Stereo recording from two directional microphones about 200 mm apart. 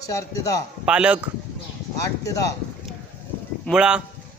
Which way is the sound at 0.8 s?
5° right (ahead or behind).